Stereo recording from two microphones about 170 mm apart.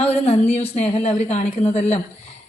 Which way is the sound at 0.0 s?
35° left (ahead or behind).